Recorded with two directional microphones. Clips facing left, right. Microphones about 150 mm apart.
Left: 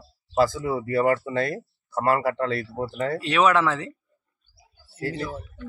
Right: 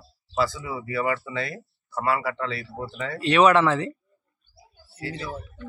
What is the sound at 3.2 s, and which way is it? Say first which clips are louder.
Speech: right 4 dB; centre (ahead or behind).